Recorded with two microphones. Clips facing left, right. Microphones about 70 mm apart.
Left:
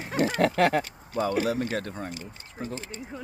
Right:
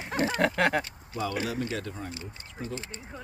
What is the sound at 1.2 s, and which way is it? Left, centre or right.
Speech, left.